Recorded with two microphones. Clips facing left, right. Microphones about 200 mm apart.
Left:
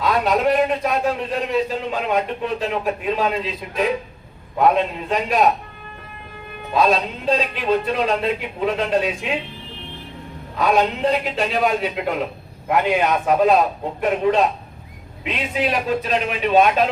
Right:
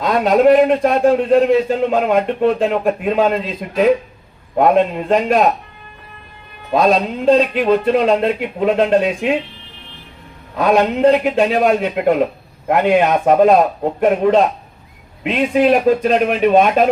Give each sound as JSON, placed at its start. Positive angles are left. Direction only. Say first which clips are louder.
{"t": 0.0, "sound": "a man's voice", "louder": "right 6 dB", "side_deg": -50}
{"t": 6.7, "sound": "a man's voice", "louder": "right 4 dB", "side_deg": -50}
{"t": 10.7, "sound": "a man's voice", "louder": "right 6 dB", "side_deg": -50}